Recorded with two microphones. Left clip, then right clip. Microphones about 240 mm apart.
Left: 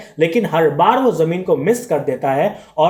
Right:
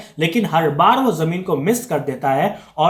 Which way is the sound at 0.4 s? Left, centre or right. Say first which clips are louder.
Right 1 dB; right.